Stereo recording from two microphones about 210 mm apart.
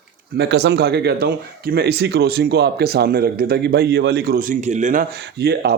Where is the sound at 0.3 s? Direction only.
55° right (ahead or behind).